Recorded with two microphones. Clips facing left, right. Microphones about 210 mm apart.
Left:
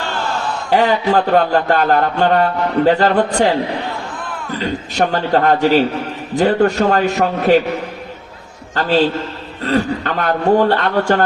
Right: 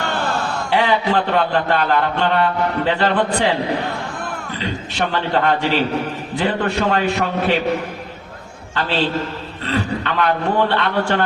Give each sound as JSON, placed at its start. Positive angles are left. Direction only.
{"t": 0.7, "sound": "a man's voice", "side_deg": 45}
{"t": 4.5, "sound": "a man's voice", "side_deg": 45}
{"t": 8.7, "sound": "a man's voice", "side_deg": 45}